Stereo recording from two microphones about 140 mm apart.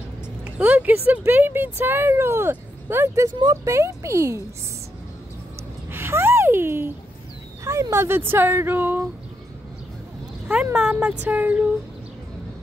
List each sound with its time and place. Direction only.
0.6 s speech: 10° right (ahead or behind)
5.9 s a sound: 15° right (ahead or behind)
7.6 s speech: 20° right (ahead or behind)
10.5 s speech: 5° right (ahead or behind)